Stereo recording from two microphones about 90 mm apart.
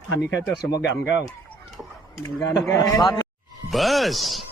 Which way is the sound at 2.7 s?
45° left (ahead or behind).